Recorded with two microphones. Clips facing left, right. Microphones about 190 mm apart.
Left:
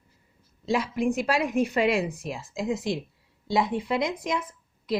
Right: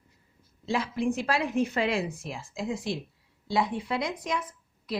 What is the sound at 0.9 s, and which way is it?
A woman's voice, 15° left (ahead or behind).